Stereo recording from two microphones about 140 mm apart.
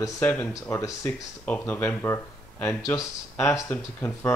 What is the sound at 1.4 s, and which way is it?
Speech, 10° left (ahead or behind).